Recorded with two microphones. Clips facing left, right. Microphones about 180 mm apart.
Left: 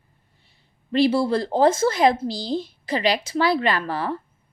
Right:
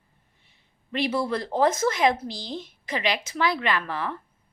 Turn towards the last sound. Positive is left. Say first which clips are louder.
# left 4 dB
turn(degrees=35)  # may be behind; listen again after turning